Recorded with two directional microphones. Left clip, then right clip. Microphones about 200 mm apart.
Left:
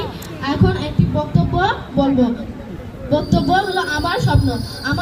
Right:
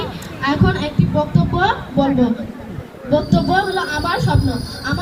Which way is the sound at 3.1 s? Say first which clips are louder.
Even; 35° left (ahead or behind).